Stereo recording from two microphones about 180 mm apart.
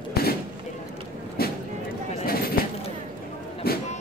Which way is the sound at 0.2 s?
60° left (ahead or behind).